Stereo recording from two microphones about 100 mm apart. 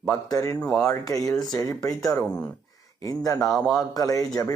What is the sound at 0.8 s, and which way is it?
Speech, 35° left (ahead or behind).